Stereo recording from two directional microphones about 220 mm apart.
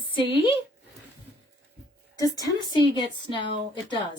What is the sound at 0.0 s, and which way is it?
Speech, 20° left (ahead or behind).